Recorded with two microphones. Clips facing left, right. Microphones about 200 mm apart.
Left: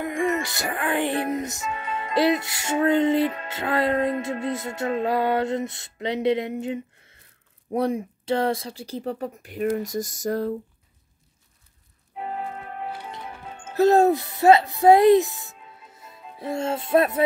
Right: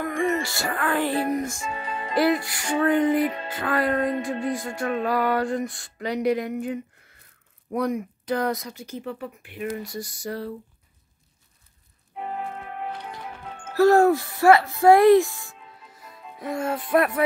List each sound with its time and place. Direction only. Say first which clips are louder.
0.0 s music: even; 20° left (ahead or behind)
1.6 s music: left 1 dB; 30° right (ahead or behind)
2.1 s music: even; 20° left (ahead or behind)
7.7 s speech: left 1 dB; 30° left (ahead or behind); by 10.5 s 45° left (ahead or behind)
12.2 s organ: even; centre (ahead or behind)
13.7 s speech: right 1 dB; 20° left (ahead or behind)
16.3 s music: left 1 dB; 25° left (ahead or behind)